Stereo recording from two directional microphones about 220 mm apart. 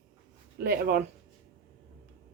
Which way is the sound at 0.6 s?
45° right (ahead or behind).